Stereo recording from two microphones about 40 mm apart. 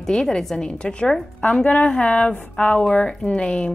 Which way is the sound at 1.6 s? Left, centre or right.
Left.